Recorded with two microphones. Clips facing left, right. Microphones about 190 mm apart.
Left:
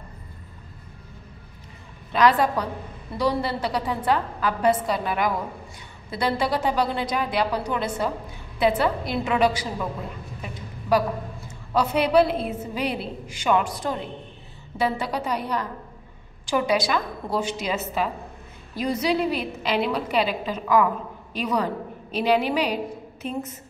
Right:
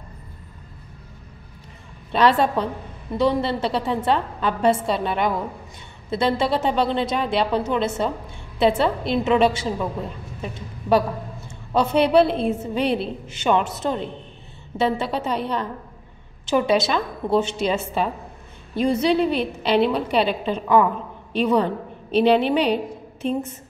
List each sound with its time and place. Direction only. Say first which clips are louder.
2.1 s a woman's voice: right 2 dB; 25° right (ahead or behind)
10.9 s a woman's voice: right 2 dB; 25° right (ahead or behind)